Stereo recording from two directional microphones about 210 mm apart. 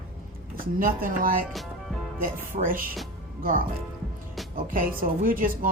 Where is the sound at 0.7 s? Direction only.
40° right (ahead or behind).